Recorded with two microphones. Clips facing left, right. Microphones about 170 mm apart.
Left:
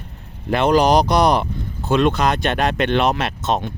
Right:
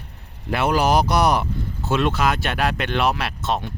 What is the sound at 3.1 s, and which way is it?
Speech, 20° left (ahead or behind).